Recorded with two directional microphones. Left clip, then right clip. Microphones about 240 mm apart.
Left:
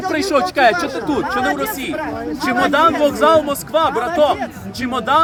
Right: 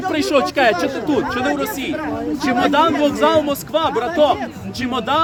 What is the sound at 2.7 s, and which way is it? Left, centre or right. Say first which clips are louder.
A man's voice: left 3 dB; centre.